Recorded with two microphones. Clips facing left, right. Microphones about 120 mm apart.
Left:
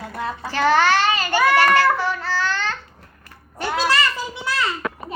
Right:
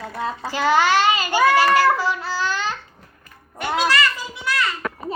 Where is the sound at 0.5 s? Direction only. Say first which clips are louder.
Left 1 dB; 15° right (ahead or behind).